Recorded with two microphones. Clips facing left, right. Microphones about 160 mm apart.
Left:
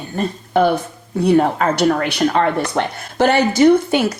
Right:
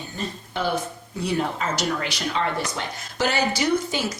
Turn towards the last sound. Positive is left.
turn(degrees=60)  # may be behind; listen again after turning